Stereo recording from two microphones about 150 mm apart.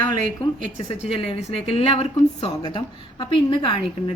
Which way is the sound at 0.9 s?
40° left (ahead or behind).